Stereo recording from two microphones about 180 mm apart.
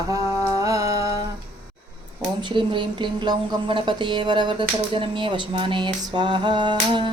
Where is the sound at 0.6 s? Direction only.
20° right (ahead or behind).